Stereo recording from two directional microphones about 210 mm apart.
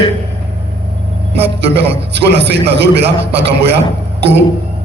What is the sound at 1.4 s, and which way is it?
A man's voice, 55° right (ahead or behind).